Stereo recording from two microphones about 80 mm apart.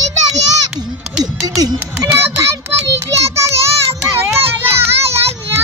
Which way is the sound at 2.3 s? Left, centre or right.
Right.